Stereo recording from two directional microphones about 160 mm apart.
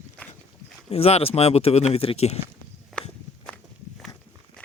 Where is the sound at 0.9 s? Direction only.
40° left (ahead or behind).